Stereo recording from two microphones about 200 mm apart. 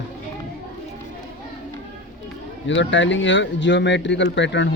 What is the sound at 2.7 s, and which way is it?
A man's voice, 65° left (ahead or behind).